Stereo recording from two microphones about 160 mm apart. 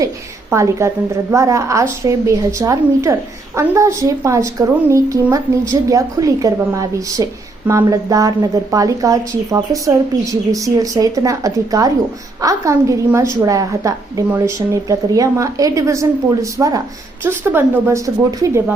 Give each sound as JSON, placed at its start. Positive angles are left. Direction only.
{"t": 0.5, "sound": "a woman's voice", "side_deg": -20}